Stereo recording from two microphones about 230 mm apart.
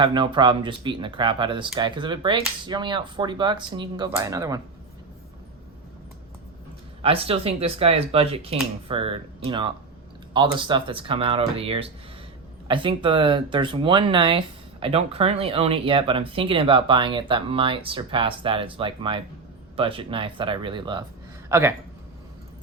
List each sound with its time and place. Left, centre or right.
0.0 s speech: right
7.0 s speech: right